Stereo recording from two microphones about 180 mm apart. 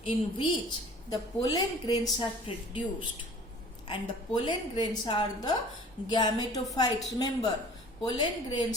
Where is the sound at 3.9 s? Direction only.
25° left (ahead or behind).